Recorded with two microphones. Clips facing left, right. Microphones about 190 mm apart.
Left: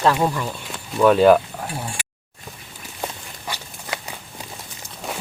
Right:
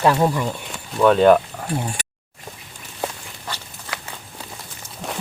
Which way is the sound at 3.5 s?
10° left (ahead or behind).